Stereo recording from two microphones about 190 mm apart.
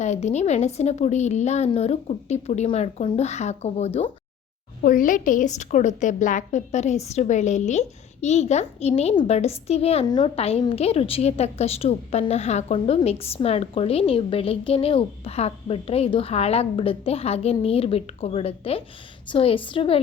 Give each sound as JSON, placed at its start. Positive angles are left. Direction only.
{"t": 0.0, "sound": "a woman's voice", "side_deg": 35}
{"t": 4.8, "sound": "a woman's voice", "side_deg": 45}